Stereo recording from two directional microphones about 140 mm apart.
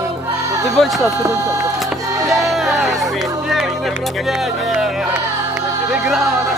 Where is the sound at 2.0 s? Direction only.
25° right (ahead or behind).